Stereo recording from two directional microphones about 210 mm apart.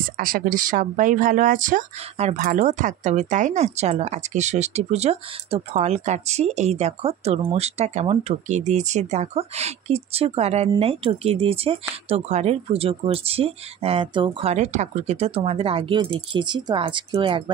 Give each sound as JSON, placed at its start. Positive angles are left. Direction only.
{"t": 0.0, "sound": "speech", "side_deg": -40}